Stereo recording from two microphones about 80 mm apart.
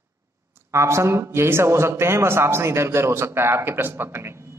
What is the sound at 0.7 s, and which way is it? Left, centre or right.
A man's voice, right.